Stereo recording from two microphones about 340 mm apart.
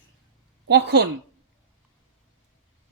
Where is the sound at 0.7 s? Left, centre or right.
Right.